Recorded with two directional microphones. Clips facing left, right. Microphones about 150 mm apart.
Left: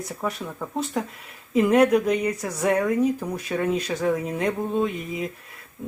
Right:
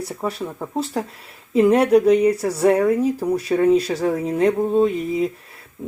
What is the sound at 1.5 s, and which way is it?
A woman's voice, 30° right (ahead or behind).